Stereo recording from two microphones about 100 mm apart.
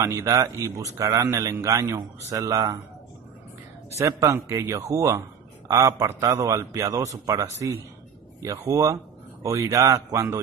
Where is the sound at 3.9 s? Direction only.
30° right (ahead or behind).